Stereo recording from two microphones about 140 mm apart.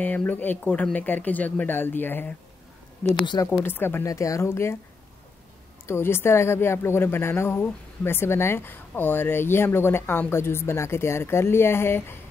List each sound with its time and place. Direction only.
0.0 s a woman's voice: 10° left (ahead or behind)
3.6 s speech: 15° left (ahead or behind)
5.9 s a woman's voice: 15° left (ahead or behind)